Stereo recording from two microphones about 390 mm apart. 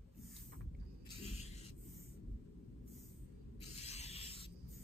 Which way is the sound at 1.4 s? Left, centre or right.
Centre.